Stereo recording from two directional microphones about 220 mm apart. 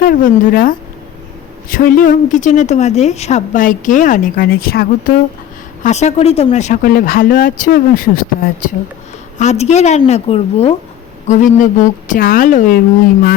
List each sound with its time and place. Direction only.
0.0 s a woman's voice: 40° left (ahead or behind)
5.8 s a woman's voice: 30° left (ahead or behind)